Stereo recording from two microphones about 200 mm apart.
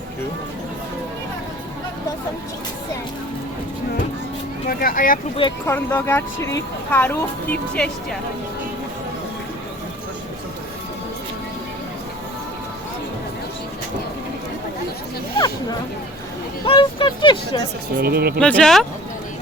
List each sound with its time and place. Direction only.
4.7 s speech: 45° left (ahead or behind)
5.6 s a woman's voice: 10° left (ahead or behind)
16.6 s vehicle: 25° left (ahead or behind)
17.9 s speech: 50° right (ahead or behind)
18.3 s speech: 5° left (ahead or behind)